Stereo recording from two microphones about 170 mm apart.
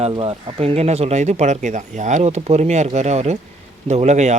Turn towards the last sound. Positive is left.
turn(degrees=-45)  # may be behind; listen again after turning